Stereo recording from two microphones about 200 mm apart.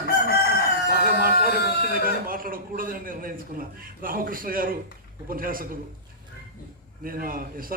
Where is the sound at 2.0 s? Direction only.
45° right (ahead or behind).